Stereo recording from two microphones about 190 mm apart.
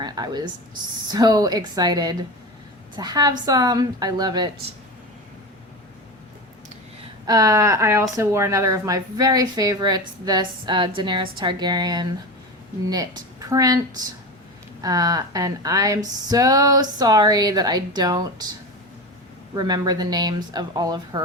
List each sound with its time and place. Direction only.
0.0 s a sound: 20° right (ahead or behind)
1.1 s a woman's voice: 20° right (ahead or behind)
7.3 s a woman's voice: 15° right (ahead or behind)
19.5 s a woman's voice: 20° right (ahead or behind)